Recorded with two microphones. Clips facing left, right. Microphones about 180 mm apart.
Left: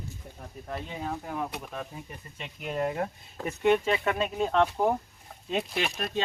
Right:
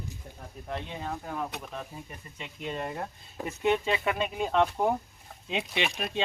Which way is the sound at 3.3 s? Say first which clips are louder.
Left 3 dB; 15° right (ahead or behind).